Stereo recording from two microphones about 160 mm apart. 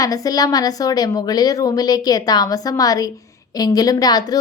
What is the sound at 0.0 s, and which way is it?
Speech, 25° left (ahead or behind).